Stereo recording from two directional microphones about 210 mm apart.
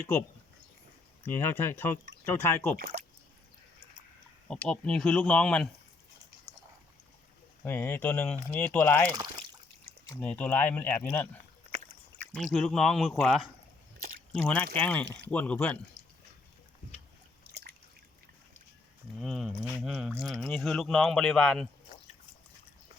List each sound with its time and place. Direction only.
1.2 s speech: 10° left (ahead or behind)
2.7 s speech: 45° right (ahead or behind)
4.4 s speech: 5° left (ahead or behind)
7.6 s speech: 10° left (ahead or behind)
9.1 s a sound: 20° right (ahead or behind)
10.2 s speech: 5° left (ahead or behind)
15.0 s speech: 55° right (ahead or behind)
15.3 s speech: 5° left (ahead or behind)
17.5 s drip: 50° right (ahead or behind)
19.2 s speech: centre (ahead or behind)